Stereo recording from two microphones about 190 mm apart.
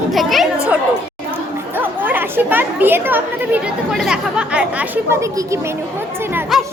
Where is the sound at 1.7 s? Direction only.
10° right (ahead or behind).